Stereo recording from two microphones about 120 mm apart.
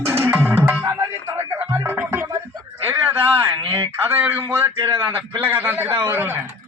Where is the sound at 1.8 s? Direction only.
15° right (ahead or behind).